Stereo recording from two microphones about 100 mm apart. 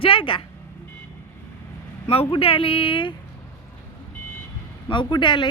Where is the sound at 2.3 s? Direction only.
65° left (ahead or behind).